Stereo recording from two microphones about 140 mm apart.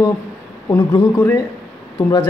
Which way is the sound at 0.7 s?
25° left (ahead or behind).